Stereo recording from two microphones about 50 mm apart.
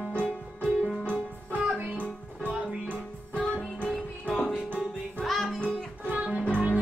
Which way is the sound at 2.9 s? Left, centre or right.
Left.